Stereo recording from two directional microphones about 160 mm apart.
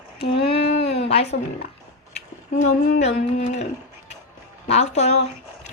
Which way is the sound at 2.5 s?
50° left (ahead or behind).